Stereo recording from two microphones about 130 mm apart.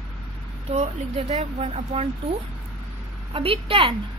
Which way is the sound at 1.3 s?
55° right (ahead or behind).